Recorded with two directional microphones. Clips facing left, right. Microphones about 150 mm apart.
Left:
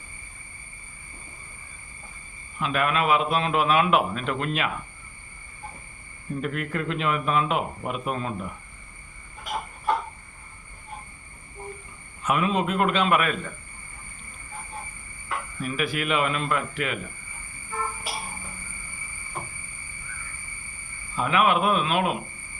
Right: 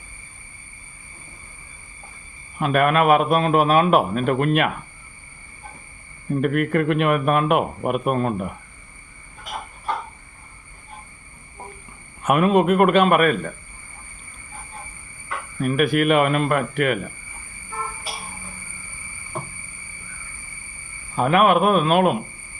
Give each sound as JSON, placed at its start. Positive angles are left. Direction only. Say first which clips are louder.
{"t": 2.6, "sound": "a man's voice", "louder": "right 7 dB", "side_deg": -50}
{"t": 6.3, "sound": "a man's voice", "louder": "right 9 dB", "side_deg": -60}
{"t": 12.2, "sound": "a man's voice", "louder": "right 7 dB", "side_deg": -55}
{"t": 15.6, "sound": "a man's voice", "louder": "right 10 dB", "side_deg": -55}
{"t": 21.2, "sound": "a man's voice", "louder": "right 6 dB", "side_deg": -50}